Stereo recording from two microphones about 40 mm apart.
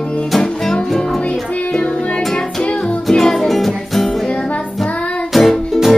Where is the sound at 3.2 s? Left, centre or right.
Centre.